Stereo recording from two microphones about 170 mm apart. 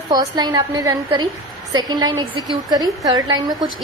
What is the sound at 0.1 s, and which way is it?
A woman's voice, 25° right (ahead or behind).